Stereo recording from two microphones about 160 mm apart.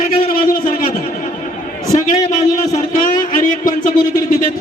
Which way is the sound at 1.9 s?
45° left (ahead or behind).